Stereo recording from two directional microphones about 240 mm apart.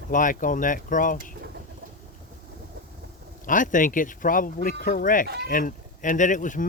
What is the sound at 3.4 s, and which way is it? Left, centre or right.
Speech, left.